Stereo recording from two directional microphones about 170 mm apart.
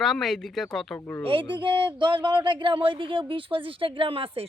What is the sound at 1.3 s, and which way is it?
Speech, 30° right (ahead or behind).